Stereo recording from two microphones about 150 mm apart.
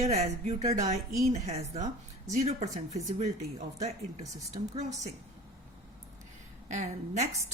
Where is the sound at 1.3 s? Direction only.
45° right (ahead or behind).